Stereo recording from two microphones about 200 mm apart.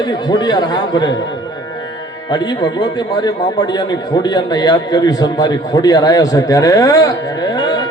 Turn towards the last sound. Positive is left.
turn(degrees=20)  # may be behind; listen again after turning